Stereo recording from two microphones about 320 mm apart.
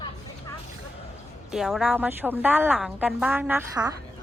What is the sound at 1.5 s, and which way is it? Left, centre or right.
A woman's voice, centre.